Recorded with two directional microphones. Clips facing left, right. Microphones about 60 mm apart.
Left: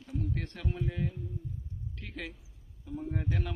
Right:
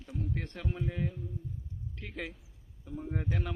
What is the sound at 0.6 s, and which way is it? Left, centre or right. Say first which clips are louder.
A man's voice: even; centre.